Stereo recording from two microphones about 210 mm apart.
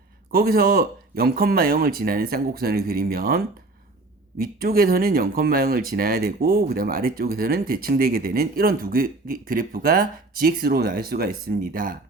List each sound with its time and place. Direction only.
0.3 s speech: 45° right (ahead or behind)